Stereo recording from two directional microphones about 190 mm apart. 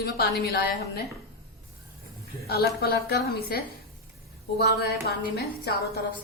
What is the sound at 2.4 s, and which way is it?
A woman's voice, 55° left (ahead or behind).